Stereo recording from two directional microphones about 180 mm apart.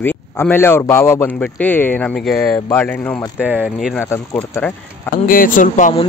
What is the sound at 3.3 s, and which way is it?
Speech, 10° right (ahead or behind).